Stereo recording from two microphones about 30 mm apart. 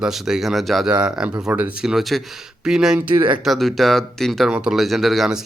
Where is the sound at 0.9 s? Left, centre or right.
Right.